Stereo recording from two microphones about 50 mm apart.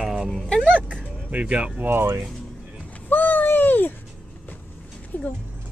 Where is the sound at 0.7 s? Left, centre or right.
Left.